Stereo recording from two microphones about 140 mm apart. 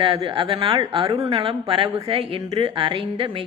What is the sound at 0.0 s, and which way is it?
Speech, 40° right (ahead or behind).